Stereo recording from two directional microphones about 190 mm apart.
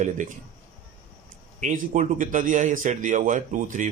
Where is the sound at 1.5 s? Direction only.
40° right (ahead or behind).